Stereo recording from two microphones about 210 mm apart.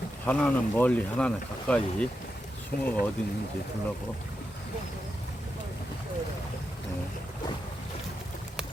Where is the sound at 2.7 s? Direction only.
45° left (ahead or behind).